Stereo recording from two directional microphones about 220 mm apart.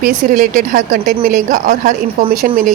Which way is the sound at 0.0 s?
35° right (ahead or behind).